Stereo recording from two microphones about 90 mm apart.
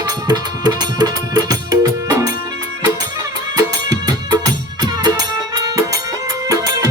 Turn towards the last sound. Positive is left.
turn(degrees=-45)  # may be behind; listen again after turning